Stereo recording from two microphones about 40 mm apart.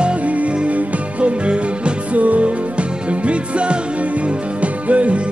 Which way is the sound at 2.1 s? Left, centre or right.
Right.